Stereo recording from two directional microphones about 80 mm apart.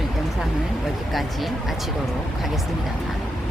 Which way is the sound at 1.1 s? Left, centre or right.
Centre.